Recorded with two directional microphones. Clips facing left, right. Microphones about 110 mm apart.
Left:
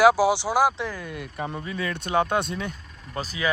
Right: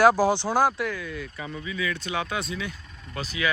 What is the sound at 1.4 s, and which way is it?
Speech, 50° left (ahead or behind).